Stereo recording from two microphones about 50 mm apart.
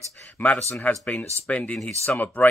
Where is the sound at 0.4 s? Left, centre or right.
Left.